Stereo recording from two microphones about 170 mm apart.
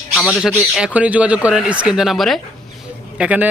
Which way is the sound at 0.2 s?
Centre (ahead or behind).